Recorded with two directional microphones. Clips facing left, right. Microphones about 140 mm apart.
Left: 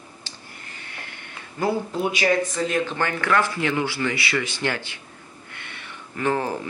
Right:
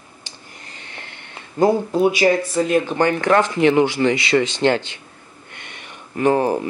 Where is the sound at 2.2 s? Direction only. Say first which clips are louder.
Right 5 dB; 35° right (ahead or behind).